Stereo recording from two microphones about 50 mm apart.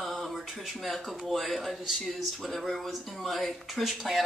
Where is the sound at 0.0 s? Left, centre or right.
Centre.